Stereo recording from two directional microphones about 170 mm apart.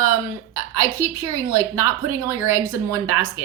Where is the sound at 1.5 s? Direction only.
15° right (ahead or behind).